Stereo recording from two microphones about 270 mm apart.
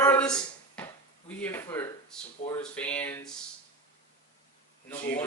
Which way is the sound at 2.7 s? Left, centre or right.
Centre.